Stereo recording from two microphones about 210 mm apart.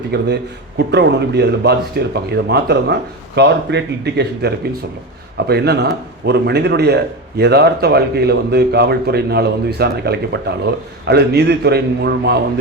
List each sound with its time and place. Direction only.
0.1 s a man's voice: 55° right (ahead or behind)